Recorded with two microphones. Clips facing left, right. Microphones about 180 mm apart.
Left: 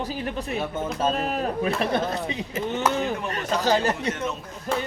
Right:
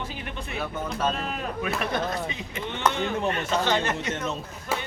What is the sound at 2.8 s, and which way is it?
Speech, 10° left (ahead or behind).